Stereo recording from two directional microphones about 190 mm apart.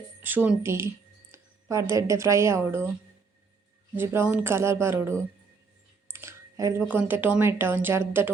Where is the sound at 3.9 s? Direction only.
10° right (ahead or behind).